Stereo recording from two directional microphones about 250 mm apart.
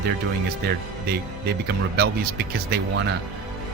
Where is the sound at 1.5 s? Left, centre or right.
Right.